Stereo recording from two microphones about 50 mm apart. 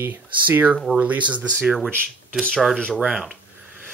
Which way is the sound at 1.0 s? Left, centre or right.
Right.